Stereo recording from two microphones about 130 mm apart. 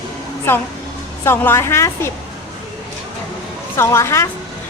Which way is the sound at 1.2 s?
20° left (ahead or behind).